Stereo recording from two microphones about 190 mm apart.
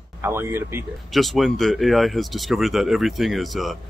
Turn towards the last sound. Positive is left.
turn(degrees=0)  # may be behind; listen again after turning